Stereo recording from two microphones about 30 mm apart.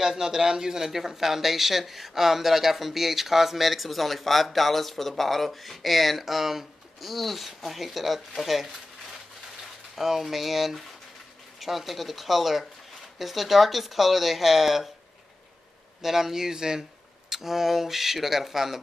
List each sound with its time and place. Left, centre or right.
0.0 s speech: centre
16.0 s speech: centre
17.3 s speech: centre